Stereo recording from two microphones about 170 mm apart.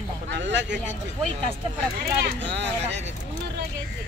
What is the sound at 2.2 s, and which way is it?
Speech, 90° right.